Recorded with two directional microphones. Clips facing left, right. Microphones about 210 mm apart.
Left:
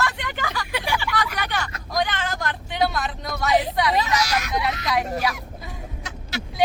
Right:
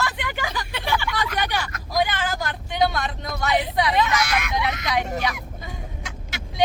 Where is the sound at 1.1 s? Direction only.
25° right (ahead or behind).